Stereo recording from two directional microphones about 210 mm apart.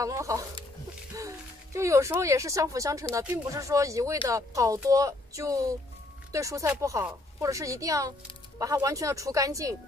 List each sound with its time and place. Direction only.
0.0 s speech: 15° right (ahead or behind)